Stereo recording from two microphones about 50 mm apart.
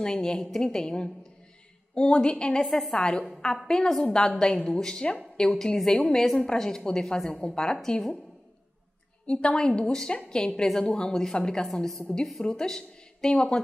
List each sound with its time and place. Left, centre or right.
0.0 s a woman's voice: centre
2.7 s a woman's voice: centre
3.0 s a woman's voice: centre
9.2 s a woman's voice: left
11.6 s a woman's voice: centre